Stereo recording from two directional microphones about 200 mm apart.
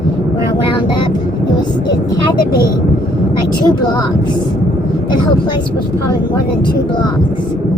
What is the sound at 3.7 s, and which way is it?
Speech, 20° left (ahead or behind).